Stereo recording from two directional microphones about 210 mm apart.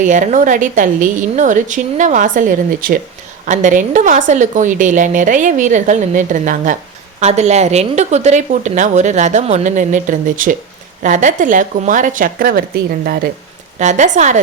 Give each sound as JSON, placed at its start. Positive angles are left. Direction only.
{"t": 0.0, "sound": "speech", "side_deg": -35}
{"t": 13.7, "sound": "speech", "side_deg": -35}